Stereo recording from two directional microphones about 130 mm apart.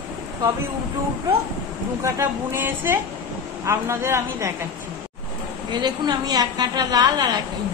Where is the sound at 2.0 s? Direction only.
20° right (ahead or behind).